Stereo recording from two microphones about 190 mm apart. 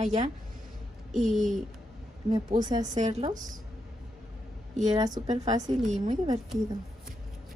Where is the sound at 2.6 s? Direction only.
40° right (ahead or behind).